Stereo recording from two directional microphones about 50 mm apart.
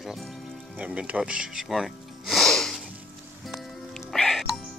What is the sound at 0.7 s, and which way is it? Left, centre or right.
Speech, right.